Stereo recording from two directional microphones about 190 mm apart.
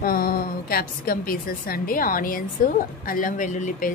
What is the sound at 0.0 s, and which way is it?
A woman's voice, 50° left (ahead or behind).